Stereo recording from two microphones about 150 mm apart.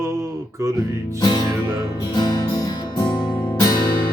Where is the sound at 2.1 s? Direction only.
25° left (ahead or behind).